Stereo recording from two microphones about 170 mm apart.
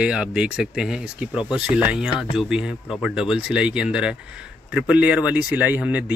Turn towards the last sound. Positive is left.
turn(degrees=-10)  # may be behind; listen again after turning